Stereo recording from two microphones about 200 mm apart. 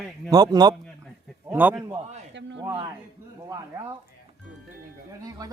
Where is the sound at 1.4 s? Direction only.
5° right (ahead or behind).